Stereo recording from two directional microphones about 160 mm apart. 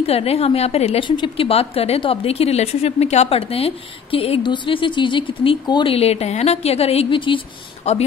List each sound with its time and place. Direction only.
0.0 s a woman's voice: 40° left (ahead or behind)